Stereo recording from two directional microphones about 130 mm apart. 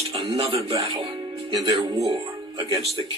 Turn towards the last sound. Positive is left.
turn(degrees=-45)  # may be behind; listen again after turning